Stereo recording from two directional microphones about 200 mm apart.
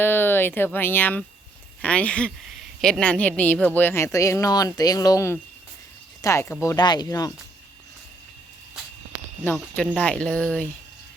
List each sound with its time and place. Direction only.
0.0 s speech: 10° left (ahead or behind)
9.7 s speech: 5° left (ahead or behind)